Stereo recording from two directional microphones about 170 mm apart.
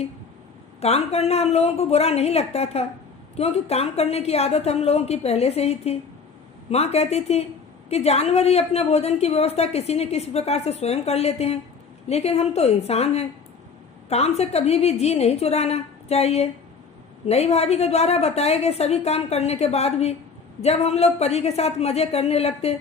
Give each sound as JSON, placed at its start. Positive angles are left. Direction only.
{"t": 0.8, "sound": "a woman's voice", "side_deg": 40}